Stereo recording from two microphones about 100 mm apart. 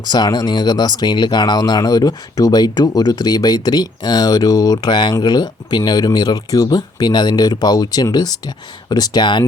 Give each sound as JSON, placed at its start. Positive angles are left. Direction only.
{"t": 0.0, "sound": "speech", "side_deg": 45}